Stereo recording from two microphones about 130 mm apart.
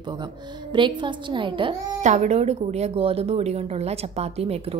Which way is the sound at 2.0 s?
65° right (ahead or behind).